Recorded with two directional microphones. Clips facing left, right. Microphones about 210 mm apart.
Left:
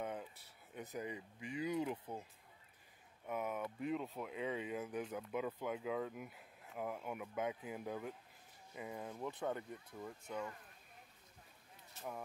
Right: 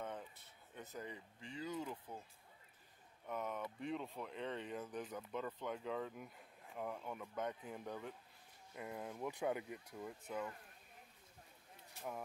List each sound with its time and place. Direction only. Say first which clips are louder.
0.0 s a sound: left 3 dB; 10° left (ahead or behind)
0.7 s speech: left 5 dB; 15° left (ahead or behind)
3.3 s speech: left 3 dB; 10° left (ahead or behind)